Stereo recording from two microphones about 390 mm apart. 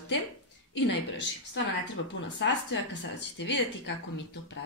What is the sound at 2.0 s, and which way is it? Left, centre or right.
A woman's voice, left.